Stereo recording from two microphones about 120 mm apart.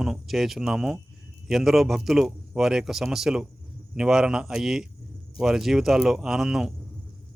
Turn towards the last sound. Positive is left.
turn(degrees=-5)  # may be behind; listen again after turning